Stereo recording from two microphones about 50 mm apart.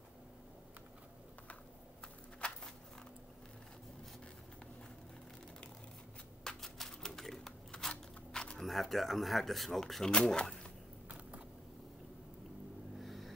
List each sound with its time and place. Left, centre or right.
2.4 s a sound: centre
6.4 s typewriter: centre
8.3 s single-lens reflex camera: centre
8.6 s speech: centre
10.1 s speech: centre
13.0 s a sound: centre